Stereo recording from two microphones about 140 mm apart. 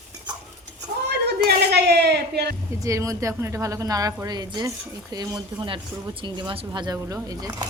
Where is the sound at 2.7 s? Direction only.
20° right (ahead or behind).